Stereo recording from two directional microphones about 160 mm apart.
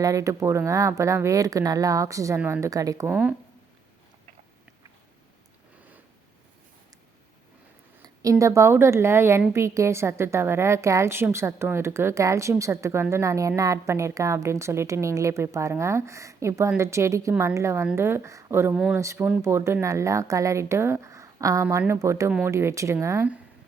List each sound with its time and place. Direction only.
0.0 s a woman's voice: 20° right (ahead or behind)
8.0 s a woman's voice: 20° right (ahead or behind)
22.3 s a woman's voice: 5° right (ahead or behind)
22.5 s a woman's voice: 20° right (ahead or behind)